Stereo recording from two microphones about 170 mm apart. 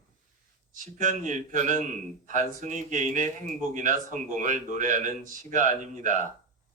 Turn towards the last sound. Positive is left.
turn(degrees=-45)  # may be behind; listen again after turning